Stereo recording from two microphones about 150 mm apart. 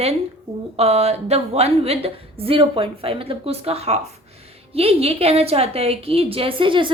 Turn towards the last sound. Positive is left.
turn(degrees=-35)  # may be behind; listen again after turning